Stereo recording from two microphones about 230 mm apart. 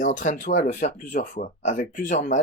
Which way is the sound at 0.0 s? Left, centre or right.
Left.